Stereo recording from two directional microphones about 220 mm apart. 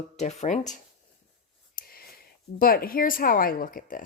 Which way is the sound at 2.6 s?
40° left (ahead or behind).